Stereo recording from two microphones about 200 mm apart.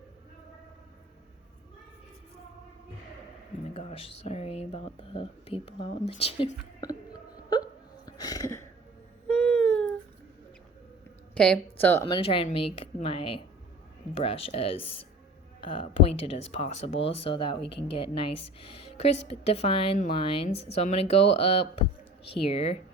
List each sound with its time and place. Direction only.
3.8 s speech: 30° left (ahead or behind)
7.6 s hiccup: 20° left (ahead or behind)
9.3 s a sound: 5° left (ahead or behind)
11.3 s speech: 5° left (ahead or behind)
12.0 s speech: 25° left (ahead or behind)